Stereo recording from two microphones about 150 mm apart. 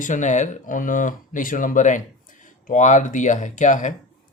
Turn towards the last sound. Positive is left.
turn(degrees=55)  # may be behind; listen again after turning